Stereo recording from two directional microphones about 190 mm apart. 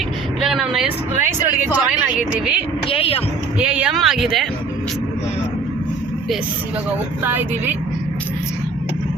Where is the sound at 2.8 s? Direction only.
30° left (ahead or behind).